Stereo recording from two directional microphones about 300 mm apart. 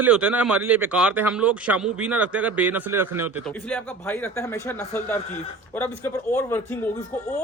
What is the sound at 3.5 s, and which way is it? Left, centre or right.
A man's voice, centre.